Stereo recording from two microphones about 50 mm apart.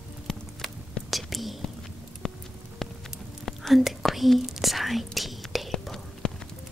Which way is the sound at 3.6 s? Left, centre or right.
Centre.